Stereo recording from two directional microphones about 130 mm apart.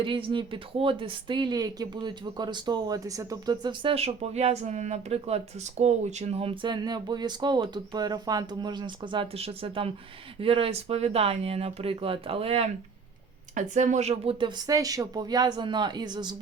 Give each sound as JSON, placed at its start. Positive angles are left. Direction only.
{"t": 0.0, "sound": "speech", "side_deg": -40}
{"t": 9.4, "sound": "speech", "side_deg": -45}
{"t": 13.6, "sound": "speech", "side_deg": -70}
{"t": 14.7, "sound": "speech", "side_deg": -30}